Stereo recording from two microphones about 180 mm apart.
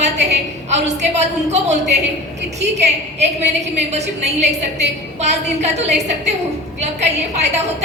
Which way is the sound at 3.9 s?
35° right (ahead or behind).